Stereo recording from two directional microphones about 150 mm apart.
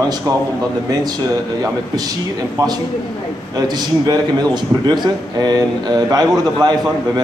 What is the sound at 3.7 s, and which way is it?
A man's voice, 30° right (ahead or behind).